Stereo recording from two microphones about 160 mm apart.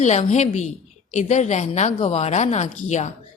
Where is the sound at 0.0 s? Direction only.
45° left (ahead or behind).